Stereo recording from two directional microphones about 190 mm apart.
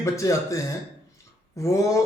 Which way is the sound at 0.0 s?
15° left (ahead or behind).